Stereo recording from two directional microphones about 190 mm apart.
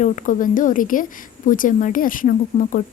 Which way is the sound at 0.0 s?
40° left (ahead or behind).